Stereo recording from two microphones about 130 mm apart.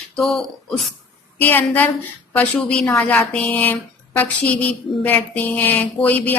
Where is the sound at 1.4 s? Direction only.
15° left (ahead or behind).